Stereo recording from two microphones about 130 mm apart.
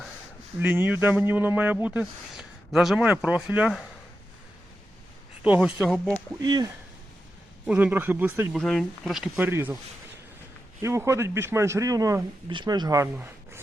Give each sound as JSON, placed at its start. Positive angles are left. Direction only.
{"t": 0.6, "sound": "speech", "side_deg": -15}
{"t": 5.4, "sound": "speech", "side_deg": -5}
{"t": 6.4, "sound": "speech", "side_deg": -30}
{"t": 7.7, "sound": "speech", "side_deg": -15}
{"t": 8.5, "sound": "speech", "side_deg": 0}
{"t": 9.3, "sound": "speech", "side_deg": -20}
{"t": 10.8, "sound": "speech", "side_deg": -20}